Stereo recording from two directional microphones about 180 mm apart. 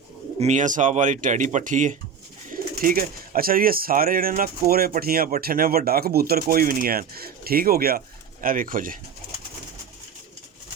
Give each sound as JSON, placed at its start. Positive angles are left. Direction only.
{"t": 0.3, "sound": "speech", "side_deg": -40}